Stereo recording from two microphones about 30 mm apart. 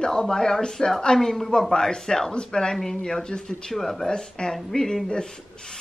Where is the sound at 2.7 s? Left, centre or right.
Centre.